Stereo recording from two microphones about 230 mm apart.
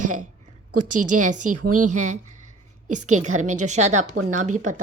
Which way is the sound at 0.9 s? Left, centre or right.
Right.